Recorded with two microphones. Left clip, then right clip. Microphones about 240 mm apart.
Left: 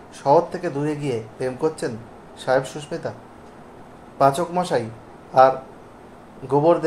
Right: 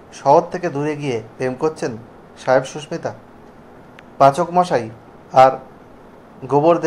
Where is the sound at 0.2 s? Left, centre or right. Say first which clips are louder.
Right 4 dB; right.